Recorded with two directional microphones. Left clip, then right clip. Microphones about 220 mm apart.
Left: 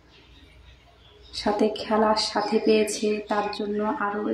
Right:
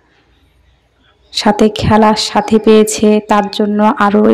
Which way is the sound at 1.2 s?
40° right (ahead or behind).